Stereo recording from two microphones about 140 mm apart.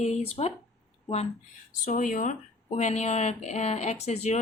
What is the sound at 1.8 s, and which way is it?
Speech, 65° left (ahead or behind).